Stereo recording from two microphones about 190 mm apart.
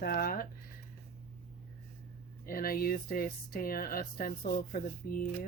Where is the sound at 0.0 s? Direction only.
50° left (ahead or behind).